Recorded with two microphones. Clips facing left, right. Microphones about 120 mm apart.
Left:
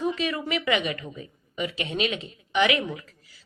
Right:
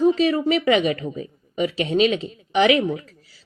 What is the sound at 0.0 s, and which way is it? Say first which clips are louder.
A woman's voice: right 10 dB; 35° right (ahead or behind).